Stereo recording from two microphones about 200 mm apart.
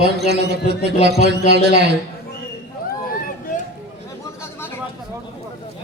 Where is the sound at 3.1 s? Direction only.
45° left (ahead or behind).